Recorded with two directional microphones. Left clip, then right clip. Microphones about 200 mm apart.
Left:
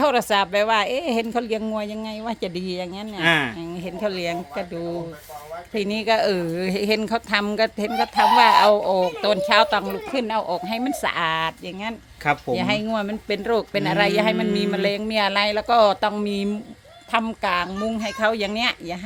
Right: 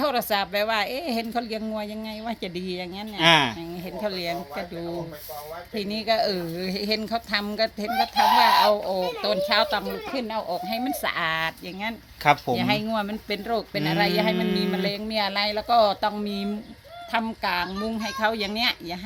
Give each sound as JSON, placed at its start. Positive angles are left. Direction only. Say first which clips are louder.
{"t": 0.0, "sound": "speech", "louder": "left 5 dB", "side_deg": 40}
{"t": 3.2, "sound": "speech", "louder": "right 1 dB", "side_deg": -20}
{"t": 4.0, "sound": "speech", "louder": "left 3 dB", "side_deg": 40}
{"t": 5.7, "sound": "speech", "louder": "left 4 dB", "side_deg": 45}
{"t": 12.2, "sound": "speech", "louder": "right 2 dB", "side_deg": -15}
{"t": 12.5, "sound": "speech", "louder": "left 2 dB", "side_deg": 35}